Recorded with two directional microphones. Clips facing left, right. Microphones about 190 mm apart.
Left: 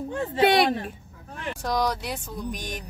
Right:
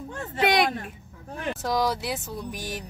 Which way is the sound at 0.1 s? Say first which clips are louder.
Left 3 dB; 25° left (ahead or behind).